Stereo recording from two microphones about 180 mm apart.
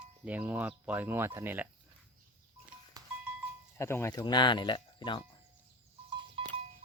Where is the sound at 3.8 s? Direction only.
15° left (ahead or behind).